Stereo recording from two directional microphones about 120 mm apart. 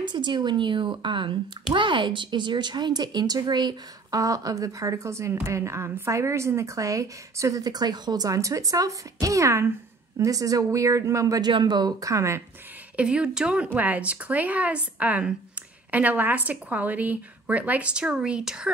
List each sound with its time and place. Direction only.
0.0 s speech: 40° right (ahead or behind); by 12.4 s 25° right (ahead or behind)
12.9 s a woman's voice: 10° right (ahead or behind)